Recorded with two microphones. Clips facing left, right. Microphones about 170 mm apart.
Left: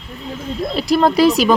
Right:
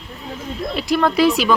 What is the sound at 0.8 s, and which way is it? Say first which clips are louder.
Speech: left 3 dB; 35° left (ahead or behind).